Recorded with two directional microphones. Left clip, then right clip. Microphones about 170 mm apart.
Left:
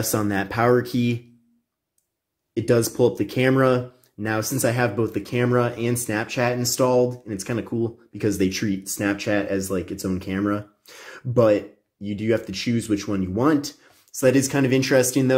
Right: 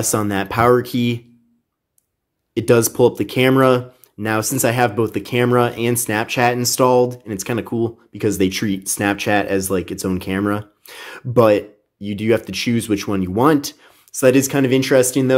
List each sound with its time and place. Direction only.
0.0 s speech: 20° right (ahead or behind)
2.5 s speech: 25° right (ahead or behind)